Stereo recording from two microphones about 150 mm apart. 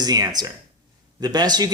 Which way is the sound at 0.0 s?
25° right (ahead or behind).